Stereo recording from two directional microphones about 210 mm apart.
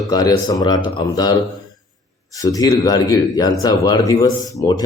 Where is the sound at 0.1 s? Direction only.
20° left (ahead or behind).